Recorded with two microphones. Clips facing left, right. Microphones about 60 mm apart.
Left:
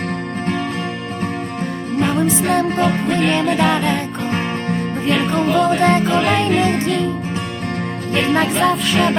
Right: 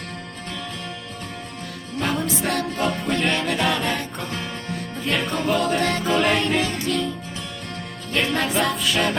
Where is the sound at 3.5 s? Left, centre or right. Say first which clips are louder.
Left 6 dB; centre.